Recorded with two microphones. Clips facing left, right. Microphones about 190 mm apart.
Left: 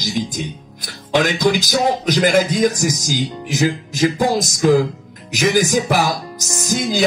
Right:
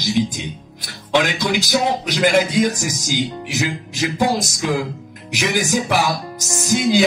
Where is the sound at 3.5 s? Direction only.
45° left (ahead or behind).